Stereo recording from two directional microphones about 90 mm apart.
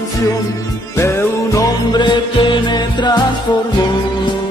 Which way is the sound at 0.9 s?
35° left (ahead or behind).